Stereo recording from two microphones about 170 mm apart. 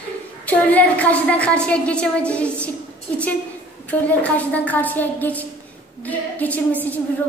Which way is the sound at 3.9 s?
10° left (ahead or behind).